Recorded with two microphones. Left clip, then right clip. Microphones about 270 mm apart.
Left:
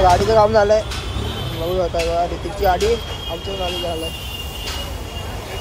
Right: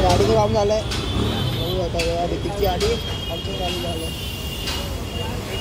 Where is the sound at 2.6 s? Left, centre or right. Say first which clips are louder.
Left 5 dB; centre.